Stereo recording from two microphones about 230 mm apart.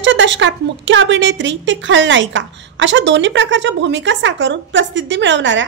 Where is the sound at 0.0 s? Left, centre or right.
Right.